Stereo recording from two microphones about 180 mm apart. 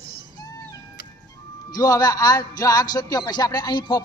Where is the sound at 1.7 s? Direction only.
20° left (ahead or behind).